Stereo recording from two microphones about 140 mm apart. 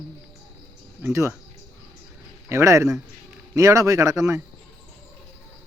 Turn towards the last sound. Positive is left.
turn(degrees=-20)  # may be behind; listen again after turning